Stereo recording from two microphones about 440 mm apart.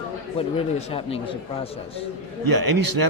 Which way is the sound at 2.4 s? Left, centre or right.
Right.